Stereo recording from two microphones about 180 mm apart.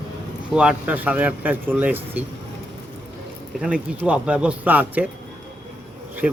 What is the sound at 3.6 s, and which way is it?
Speech, 5° right (ahead or behind).